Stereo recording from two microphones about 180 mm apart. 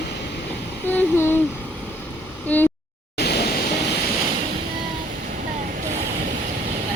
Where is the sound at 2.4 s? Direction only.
10° left (ahead or behind).